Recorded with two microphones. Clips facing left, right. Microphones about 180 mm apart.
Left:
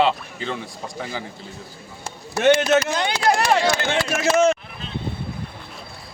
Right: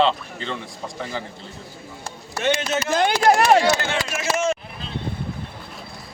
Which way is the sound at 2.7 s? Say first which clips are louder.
Left 7 dB; 65° left (ahead or behind).